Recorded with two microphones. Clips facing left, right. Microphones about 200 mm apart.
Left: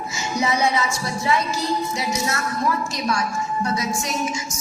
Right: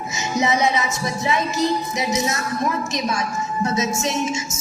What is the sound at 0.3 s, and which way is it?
Speech, 20° right (ahead or behind).